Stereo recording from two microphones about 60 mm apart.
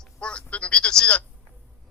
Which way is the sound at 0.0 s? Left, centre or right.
Centre.